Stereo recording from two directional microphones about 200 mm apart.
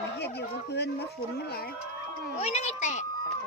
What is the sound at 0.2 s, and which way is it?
Speech, 55° left (ahead or behind).